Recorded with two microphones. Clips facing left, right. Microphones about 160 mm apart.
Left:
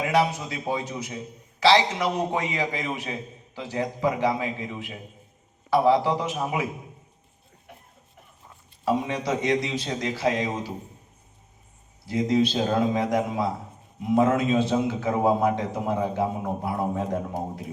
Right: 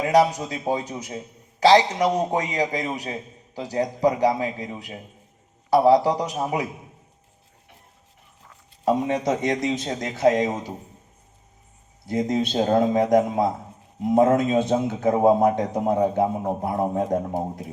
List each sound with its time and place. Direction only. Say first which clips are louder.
0.0 s a man's voice: right 4 dB; 40° right (ahead or behind)
8.8 s a man's voice: right 4 dB; 45° right (ahead or behind)
12.0 s a man's voice: left 1 dB; 45° right (ahead or behind)